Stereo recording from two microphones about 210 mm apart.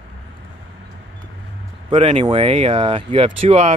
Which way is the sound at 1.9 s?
25° right (ahead or behind).